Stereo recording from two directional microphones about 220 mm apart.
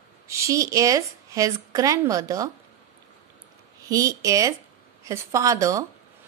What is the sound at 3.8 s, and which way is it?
A woman's voice, 15° right (ahead or behind).